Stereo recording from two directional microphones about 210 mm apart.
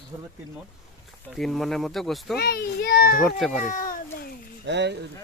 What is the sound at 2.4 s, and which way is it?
Speech, 50° left (ahead or behind).